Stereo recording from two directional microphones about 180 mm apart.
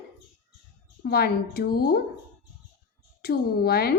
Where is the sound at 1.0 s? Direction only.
60° left (ahead or behind).